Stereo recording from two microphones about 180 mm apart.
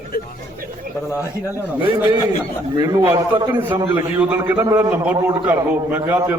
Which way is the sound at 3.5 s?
10° right (ahead or behind).